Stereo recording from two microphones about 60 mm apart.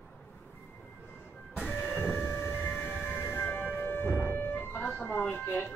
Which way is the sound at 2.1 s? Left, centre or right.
Left.